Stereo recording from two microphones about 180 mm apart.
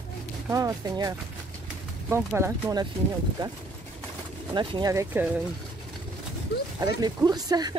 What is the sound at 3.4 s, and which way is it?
Speech, 25° right (ahead or behind).